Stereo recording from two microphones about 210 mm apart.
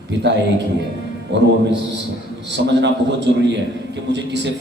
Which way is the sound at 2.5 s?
55° right (ahead or behind).